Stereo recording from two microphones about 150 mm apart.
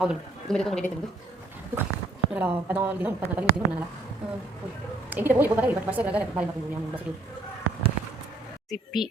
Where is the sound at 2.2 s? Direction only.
10° right (ahead or behind).